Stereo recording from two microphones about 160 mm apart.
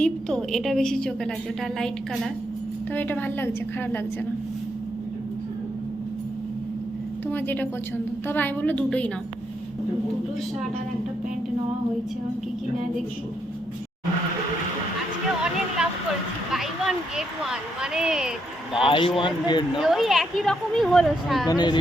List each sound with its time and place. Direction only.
0.0 s a woman's voice: 5° left (ahead or behind)
7.3 s a woman's voice: 10° left (ahead or behind)
15.8 s speech: 5° right (ahead or behind)
18.9 s a man's voice: 30° left (ahead or behind)
19.8 s a woman's voice: centre (ahead or behind)
21.4 s speech: 25° left (ahead or behind)